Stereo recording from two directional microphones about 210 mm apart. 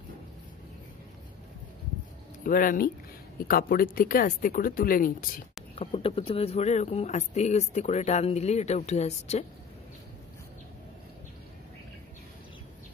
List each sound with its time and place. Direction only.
2.4 s speech: 40° left (ahead or behind)
5.8 s speech: 30° left (ahead or behind)